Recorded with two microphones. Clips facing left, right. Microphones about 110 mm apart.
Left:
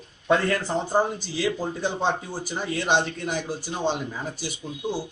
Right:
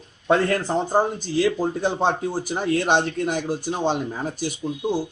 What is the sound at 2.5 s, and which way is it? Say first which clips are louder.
Speech: right 3 dB; 55° right (ahead or behind).